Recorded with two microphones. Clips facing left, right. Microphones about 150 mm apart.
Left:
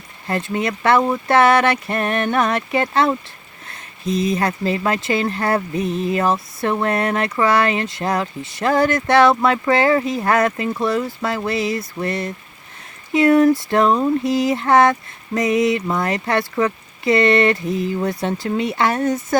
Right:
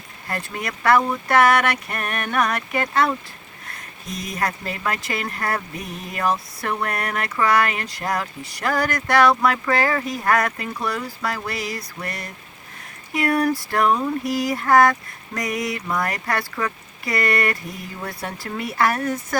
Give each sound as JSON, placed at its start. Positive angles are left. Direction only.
{"t": 0.3, "sound": "speech", "side_deg": 25}